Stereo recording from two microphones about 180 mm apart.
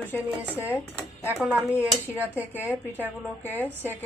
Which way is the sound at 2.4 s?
15° left (ahead or behind).